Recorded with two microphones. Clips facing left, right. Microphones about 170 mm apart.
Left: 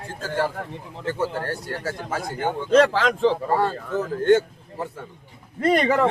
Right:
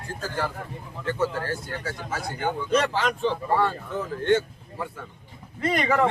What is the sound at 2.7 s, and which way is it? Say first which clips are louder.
Speech: left 8 dB; 90° left.